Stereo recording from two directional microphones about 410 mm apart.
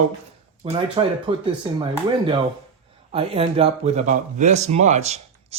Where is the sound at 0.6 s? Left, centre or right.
Centre.